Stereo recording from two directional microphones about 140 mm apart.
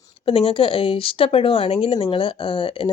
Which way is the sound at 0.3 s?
40° left (ahead or behind).